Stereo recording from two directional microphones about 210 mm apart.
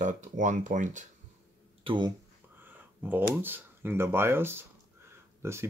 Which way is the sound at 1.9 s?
20° right (ahead or behind).